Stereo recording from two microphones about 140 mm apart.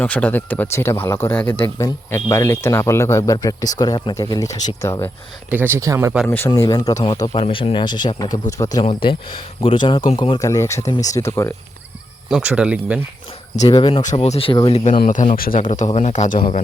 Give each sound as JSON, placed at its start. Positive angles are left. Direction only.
{"t": 0.0, "sound": "speech", "side_deg": 10}
{"t": 5.5, "sound": "speech", "side_deg": -15}
{"t": 6.2, "sound": "speech", "side_deg": 15}
{"t": 6.6, "sound": "speech", "side_deg": 25}
{"t": 7.3, "sound": "speech", "side_deg": 40}
{"t": 8.8, "sound": "speech", "side_deg": 40}
{"t": 10.3, "sound": "speech", "side_deg": 25}
{"t": 12.3, "sound": "speech", "side_deg": -5}
{"t": 13.6, "sound": "speech", "side_deg": 35}
{"t": 14.0, "sound": "speech", "side_deg": 55}
{"t": 15.0, "sound": "speech", "side_deg": 65}
{"t": 15.4, "sound": "speech", "side_deg": 80}